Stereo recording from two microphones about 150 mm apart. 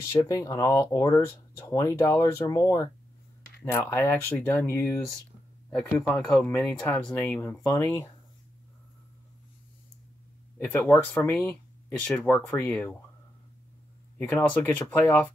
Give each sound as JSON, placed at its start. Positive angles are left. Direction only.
{"t": 0.0, "sound": "speech", "side_deg": 20}
{"t": 10.6, "sound": "speech", "side_deg": 15}
{"t": 14.1, "sound": "speech", "side_deg": 10}